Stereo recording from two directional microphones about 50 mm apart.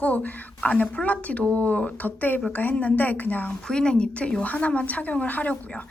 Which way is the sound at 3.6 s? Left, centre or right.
Centre.